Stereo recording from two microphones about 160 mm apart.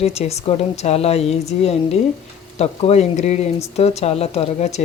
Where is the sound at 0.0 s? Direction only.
40° left (ahead or behind).